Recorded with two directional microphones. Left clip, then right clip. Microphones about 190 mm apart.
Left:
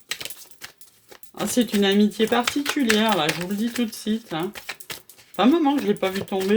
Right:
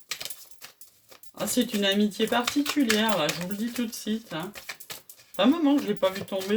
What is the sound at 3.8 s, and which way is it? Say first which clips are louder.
Speech: left 5 dB; 30° left (ahead or behind).